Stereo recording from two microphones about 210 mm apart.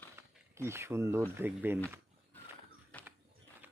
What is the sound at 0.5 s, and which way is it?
Speech, 10° right (ahead or behind).